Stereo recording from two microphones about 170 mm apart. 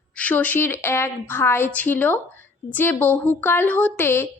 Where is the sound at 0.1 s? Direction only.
10° left (ahead or behind).